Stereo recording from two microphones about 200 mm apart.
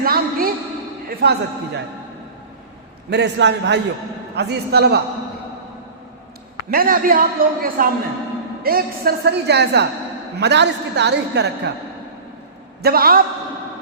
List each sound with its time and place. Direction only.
0.0 s a sound: 50° right (ahead or behind)
1.0 s a man's voice: 55° right (ahead or behind)
3.1 s a woman's voice: 60° right (ahead or behind)
6.7 s a man's voice: 45° right (ahead or behind)
12.8 s a man's voice: 50° right (ahead or behind)